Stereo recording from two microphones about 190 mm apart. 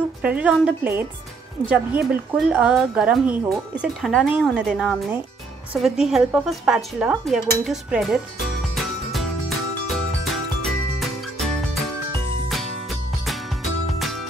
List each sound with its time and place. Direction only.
0.2 s speech: 5° right (ahead or behind)
8.7 s music: centre (ahead or behind)
13.2 s music: centre (ahead or behind)